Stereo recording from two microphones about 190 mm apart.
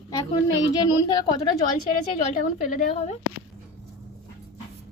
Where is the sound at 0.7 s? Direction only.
20° left (ahead or behind).